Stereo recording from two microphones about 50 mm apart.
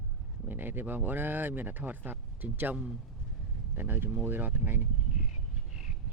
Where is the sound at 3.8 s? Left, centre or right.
Right.